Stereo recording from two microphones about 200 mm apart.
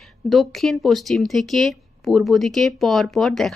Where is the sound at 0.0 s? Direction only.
Centre (ahead or behind).